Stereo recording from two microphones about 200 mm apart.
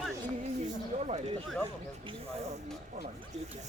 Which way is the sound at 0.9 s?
40° right (ahead or behind).